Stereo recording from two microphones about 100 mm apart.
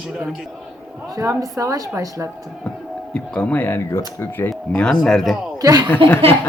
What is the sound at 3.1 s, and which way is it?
Speech, 10° left (ahead or behind).